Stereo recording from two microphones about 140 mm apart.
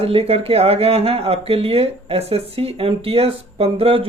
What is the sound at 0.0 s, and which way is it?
Speech, 45° right (ahead or behind).